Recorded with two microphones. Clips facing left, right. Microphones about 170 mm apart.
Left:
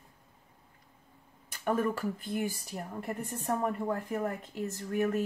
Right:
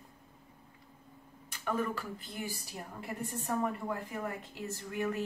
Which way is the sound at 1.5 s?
45° left (ahead or behind).